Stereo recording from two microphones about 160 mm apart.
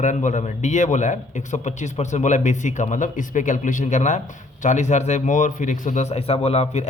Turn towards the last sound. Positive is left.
turn(degrees=40)  # may be behind; listen again after turning